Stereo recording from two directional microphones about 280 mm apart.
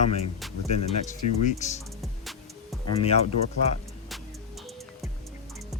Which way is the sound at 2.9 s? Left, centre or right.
Left.